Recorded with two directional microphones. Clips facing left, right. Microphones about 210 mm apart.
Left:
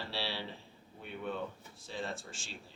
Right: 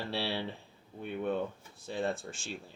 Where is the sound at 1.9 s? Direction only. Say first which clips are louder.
Right 7 dB; 55° right (ahead or behind).